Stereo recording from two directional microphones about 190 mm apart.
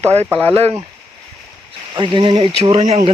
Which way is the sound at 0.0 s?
35° right (ahead or behind).